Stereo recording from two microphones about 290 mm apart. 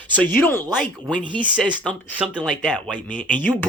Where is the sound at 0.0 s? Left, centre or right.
Centre.